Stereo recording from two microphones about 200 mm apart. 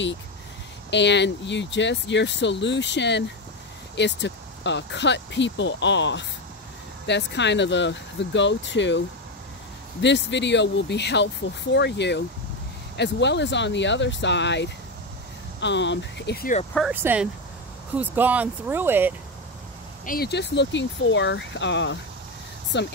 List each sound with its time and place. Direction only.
0.8 s speech: 60° left (ahead or behind)
10.0 s speech: 60° left (ahead or behind)
16.9 s speech: 10° right (ahead or behind)
20.1 s speech: 55° left (ahead or behind)